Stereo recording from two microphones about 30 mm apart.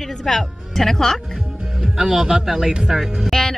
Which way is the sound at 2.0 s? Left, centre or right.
Centre.